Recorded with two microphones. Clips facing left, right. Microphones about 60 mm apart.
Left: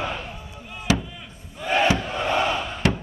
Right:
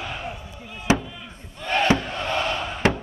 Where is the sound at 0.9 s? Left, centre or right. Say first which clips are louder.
Right 2 dB; right.